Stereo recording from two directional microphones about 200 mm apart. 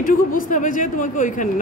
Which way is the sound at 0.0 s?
40° left (ahead or behind).